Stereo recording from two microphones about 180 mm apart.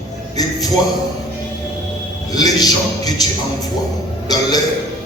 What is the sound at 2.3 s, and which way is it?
Speech, 20° left (ahead or behind).